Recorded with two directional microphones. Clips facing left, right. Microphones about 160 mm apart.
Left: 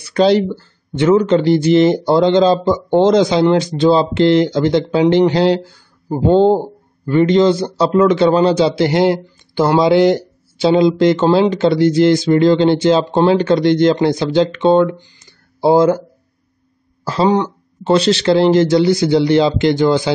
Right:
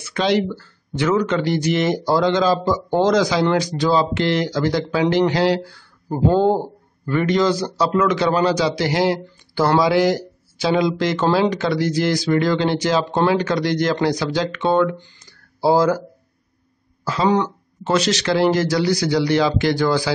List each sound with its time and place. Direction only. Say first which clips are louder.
0.0 s a man's voice: left 7 dB; 35° left (ahead or behind)
15.1 s a sound: left 2 dB; 25° left (ahead or behind)
17.0 s a man's voice: left 4 dB; 35° left (ahead or behind)